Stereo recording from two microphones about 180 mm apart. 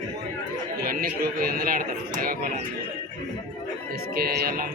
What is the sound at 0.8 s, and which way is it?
A man's voice, 55° right (ahead or behind).